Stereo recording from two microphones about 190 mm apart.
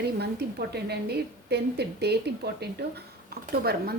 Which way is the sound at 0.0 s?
60° right (ahead or behind).